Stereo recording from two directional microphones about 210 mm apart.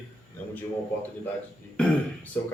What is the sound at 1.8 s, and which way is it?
Speech, 5° left (ahead or behind).